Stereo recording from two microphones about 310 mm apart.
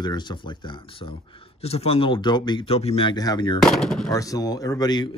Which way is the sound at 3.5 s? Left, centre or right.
Centre.